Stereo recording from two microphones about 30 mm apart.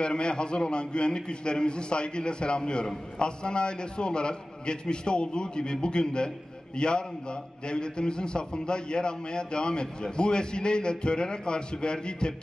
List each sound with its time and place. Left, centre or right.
0.0 s a man's voice: left